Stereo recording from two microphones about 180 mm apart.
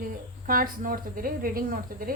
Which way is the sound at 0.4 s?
50° right (ahead or behind).